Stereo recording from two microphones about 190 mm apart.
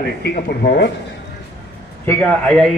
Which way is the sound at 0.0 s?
55° left (ahead or behind).